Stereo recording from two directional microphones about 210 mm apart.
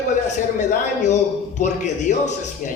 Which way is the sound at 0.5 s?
35° left (ahead or behind).